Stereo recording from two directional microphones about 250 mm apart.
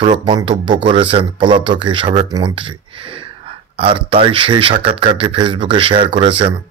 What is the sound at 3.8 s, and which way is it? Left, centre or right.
Speech, right.